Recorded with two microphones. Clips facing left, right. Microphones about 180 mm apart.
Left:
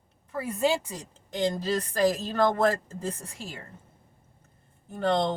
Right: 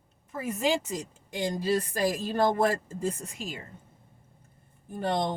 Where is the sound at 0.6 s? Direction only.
15° right (ahead or behind).